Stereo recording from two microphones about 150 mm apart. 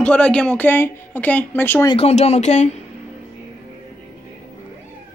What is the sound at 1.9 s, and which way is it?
Speech, 45° left (ahead or behind).